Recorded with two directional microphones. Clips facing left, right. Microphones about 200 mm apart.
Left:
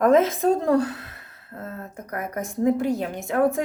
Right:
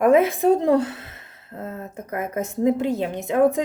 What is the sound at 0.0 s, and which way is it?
A woman's voice, 10° right (ahead or behind).